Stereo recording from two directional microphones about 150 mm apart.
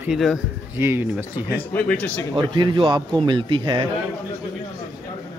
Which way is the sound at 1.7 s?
10° left (ahead or behind).